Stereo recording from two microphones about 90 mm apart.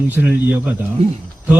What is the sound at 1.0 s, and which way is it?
Speech, 90° right.